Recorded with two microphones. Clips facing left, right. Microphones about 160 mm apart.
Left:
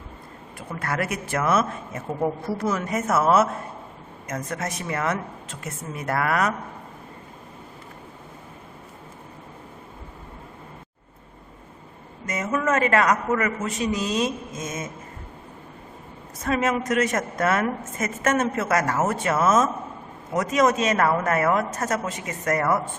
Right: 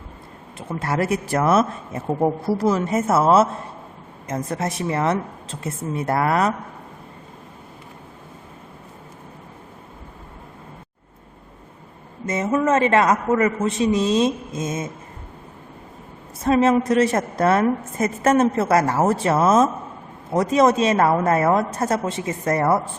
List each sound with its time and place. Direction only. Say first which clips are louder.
0.7 s a woman's voice: right 5 dB; 25° right (ahead or behind)
12.2 s a man's voice: right 5 dB; 25° right (ahead or behind)
16.4 s a woman's voice: right 7 dB; 30° right (ahead or behind)